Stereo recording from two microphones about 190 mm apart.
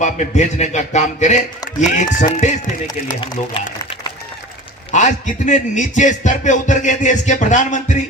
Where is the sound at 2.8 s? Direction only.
25° left (ahead or behind).